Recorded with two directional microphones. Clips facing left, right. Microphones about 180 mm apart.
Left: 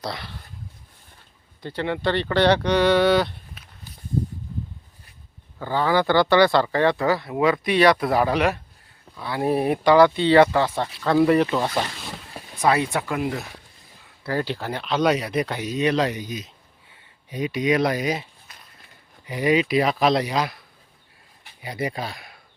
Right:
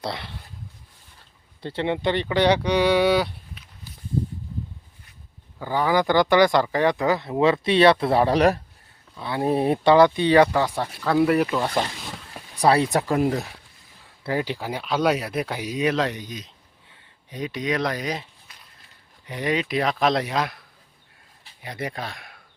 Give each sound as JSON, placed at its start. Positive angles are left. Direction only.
{"t": 0.0, "sound": "speech", "side_deg": -25}
{"t": 1.6, "sound": "speech", "side_deg": -25}
{"t": 3.6, "sound": "walk", "side_deg": 45}
{"t": 5.5, "sound": "speech", "side_deg": -15}
{"t": 9.1, "sound": "speech", "side_deg": -20}
{"t": 12.5, "sound": "speech", "side_deg": -35}
{"t": 14.3, "sound": "speech", "side_deg": -15}
{"t": 18.5, "sound": "a sound", "side_deg": 45}
{"t": 19.2, "sound": "speech", "side_deg": 5}